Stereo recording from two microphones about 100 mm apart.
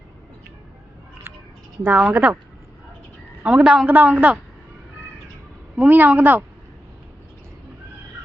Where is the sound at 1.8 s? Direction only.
15° right (ahead or behind).